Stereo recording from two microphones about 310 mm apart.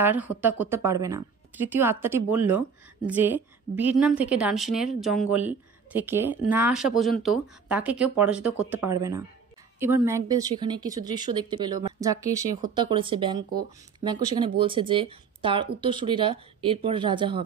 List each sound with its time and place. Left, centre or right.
0.0 s a woman's voice: centre
13.4 s speech: right
13.9 s a woman's voice: centre